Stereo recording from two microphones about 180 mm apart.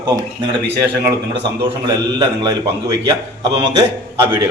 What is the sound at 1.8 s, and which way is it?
Speech, 25° right (ahead or behind).